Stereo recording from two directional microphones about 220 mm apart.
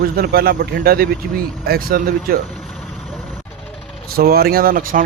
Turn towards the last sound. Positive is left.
turn(degrees=-40)  # may be behind; listen again after turning